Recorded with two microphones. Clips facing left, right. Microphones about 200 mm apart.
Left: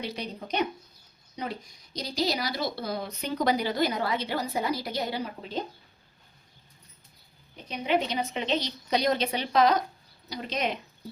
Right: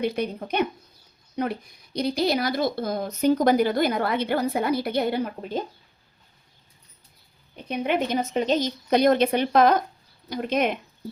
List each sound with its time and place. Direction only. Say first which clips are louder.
0.0 s speech: right 9 dB; 50° right (ahead or behind)
7.5 s a woman's voice: right 2 dB; 55° right (ahead or behind)